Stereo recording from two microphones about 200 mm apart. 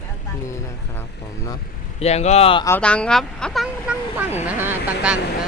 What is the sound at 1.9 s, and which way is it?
Speech, 30° left (ahead or behind).